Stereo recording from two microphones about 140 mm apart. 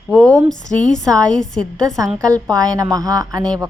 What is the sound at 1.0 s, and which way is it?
Speech, 25° right (ahead or behind).